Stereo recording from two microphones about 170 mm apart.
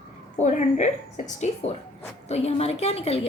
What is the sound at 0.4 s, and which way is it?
A woman's voice, 45° left (ahead or behind).